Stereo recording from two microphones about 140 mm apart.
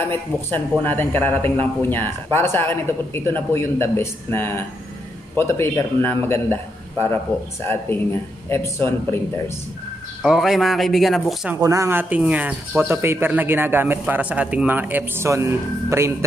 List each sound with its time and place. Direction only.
0.1 s speech: 15° left (ahead or behind)
10.2 s speech: 5° right (ahead or behind)
11.6 s speech: 20° right (ahead or behind)